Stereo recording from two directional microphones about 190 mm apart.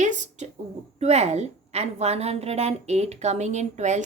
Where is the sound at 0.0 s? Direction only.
40° right (ahead or behind).